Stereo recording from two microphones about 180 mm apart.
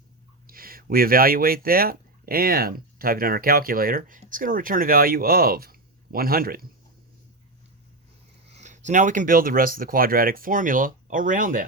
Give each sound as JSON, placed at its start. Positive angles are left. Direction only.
{"t": 0.4, "sound": "speech", "side_deg": -55}
{"t": 8.5, "sound": "speech", "side_deg": -40}